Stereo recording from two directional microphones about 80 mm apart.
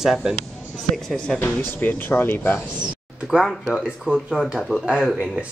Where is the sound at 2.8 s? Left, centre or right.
Centre.